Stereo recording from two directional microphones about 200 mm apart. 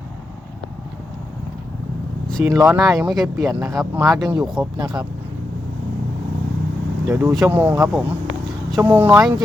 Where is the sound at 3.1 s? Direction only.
Centre (ahead or behind).